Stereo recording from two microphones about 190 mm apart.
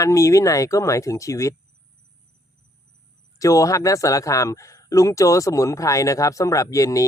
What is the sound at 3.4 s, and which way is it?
Speech, 15° left (ahead or behind).